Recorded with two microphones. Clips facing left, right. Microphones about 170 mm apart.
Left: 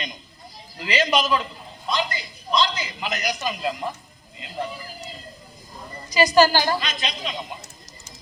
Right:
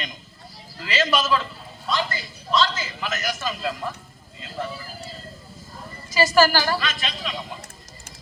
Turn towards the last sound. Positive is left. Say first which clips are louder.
# left 1 dB
turn(degrees=20)  # may be behind; listen again after turning